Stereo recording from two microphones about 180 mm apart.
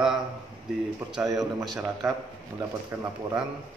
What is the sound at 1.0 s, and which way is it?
Speech, 10° right (ahead or behind).